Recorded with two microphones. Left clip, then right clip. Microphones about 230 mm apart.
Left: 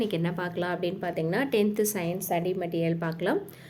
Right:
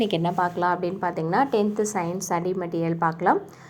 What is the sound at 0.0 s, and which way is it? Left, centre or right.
Speech, centre.